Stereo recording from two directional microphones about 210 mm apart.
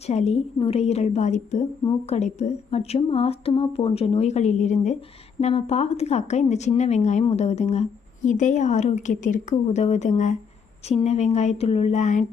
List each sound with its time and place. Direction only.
0.0 s a woman's voice: 30° left (ahead or behind)